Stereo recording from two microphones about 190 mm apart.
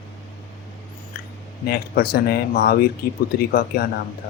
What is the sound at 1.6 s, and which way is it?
Speech, 55° left (ahead or behind).